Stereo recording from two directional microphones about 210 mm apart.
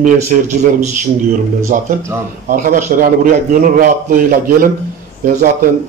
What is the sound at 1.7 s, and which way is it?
A man's voice, 40° right (ahead or behind).